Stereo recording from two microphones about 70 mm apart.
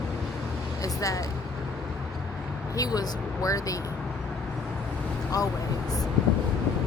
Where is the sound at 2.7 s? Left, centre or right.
Left.